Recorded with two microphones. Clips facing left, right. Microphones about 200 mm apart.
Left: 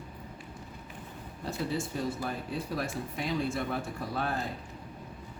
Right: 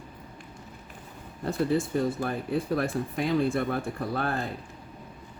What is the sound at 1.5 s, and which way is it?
Speech, 55° right (ahead or behind).